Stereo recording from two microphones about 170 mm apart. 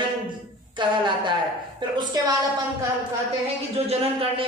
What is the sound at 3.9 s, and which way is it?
Speech, 35° right (ahead or behind).